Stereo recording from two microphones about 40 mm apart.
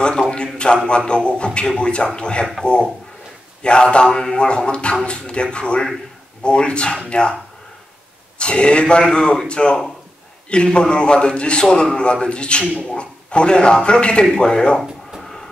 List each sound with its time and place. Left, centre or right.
0.8 s a man's voice: left
8.4 s a man's voice: left
14.8 s a sound: centre